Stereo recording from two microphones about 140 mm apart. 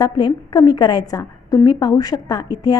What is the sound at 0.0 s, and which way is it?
A woman's voice, 30° left (ahead or behind).